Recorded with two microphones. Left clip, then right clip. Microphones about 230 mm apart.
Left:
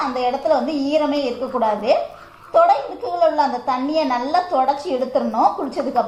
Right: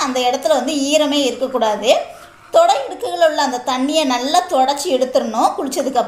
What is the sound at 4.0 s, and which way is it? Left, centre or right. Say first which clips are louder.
A woman's voice: right 4 dB; right.